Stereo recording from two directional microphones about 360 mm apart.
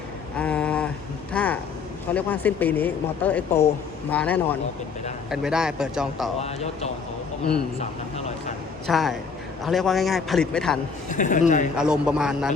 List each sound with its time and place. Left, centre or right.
0.3 s a sound: centre
2.1 s speech: centre
6.4 s a man's voice: centre
8.9 s speech: centre
11.1 s a woman's voice: left
11.8 s speech: centre